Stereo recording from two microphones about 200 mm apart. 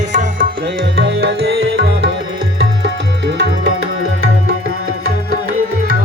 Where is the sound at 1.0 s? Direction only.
75° right (ahead or behind).